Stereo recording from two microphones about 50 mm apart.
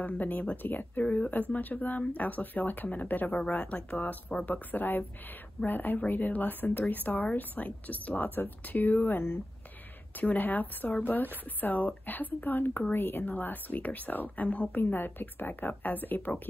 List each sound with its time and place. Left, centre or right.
0.0 s speech: left
10.2 s speech: left
14.8 s speech: left